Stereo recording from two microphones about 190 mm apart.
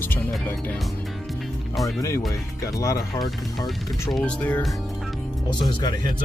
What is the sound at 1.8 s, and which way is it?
Speech, 15° left (ahead or behind).